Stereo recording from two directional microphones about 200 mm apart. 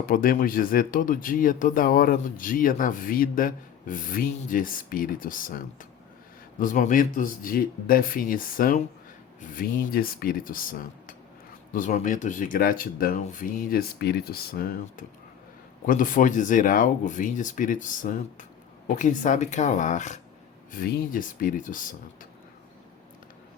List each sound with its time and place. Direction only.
0.0 s speech: 45° left (ahead or behind)